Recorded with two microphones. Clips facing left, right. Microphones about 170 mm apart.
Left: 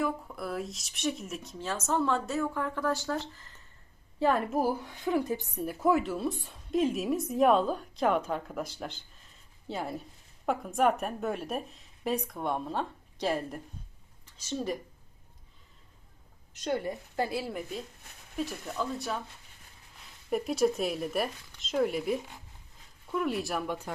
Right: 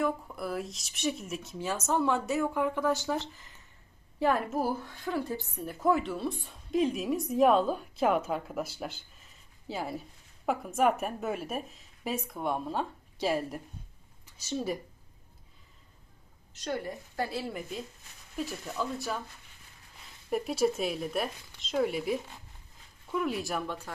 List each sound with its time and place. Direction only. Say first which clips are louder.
0.0 s speech: right 1 dB; centre (ahead or behind); by 3.5 s 15° right (ahead or behind)
4.2 s a woman's voice: left 1 dB; 5° right (ahead or behind)
4.6 s a woman's voice: left 2 dB; 15° left (ahead or behind)
5.6 s a woman's voice: left 1 dB; 5° left (ahead or behind)
16.6 s a woman's voice: left 3 dB; 20° left (ahead or behind)
17.4 s a woman's voice: left 1 dB; centre (ahead or behind)
20.3 s a woman's voice: left 1 dB; centre (ahead or behind)
23.6 s a woman's voice: left 3 dB; 15° left (ahead or behind)